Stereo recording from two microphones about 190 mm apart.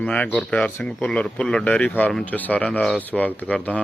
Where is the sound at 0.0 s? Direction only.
5° left (ahead or behind).